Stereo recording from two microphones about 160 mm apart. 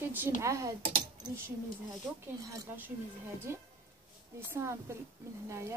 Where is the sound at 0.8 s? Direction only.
35° right (ahead or behind).